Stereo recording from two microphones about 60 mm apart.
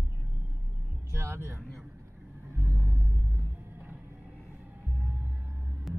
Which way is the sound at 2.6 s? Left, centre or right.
Right.